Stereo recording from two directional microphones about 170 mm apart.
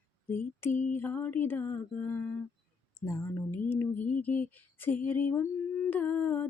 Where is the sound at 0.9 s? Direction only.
10° left (ahead or behind).